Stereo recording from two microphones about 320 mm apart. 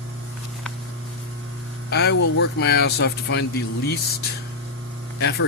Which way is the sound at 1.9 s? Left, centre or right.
Left.